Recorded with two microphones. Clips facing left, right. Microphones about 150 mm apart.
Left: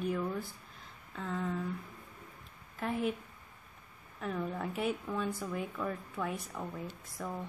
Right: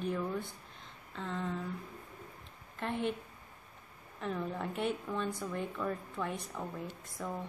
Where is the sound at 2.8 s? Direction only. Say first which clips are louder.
Left 1 dB; 5° left (ahead or behind).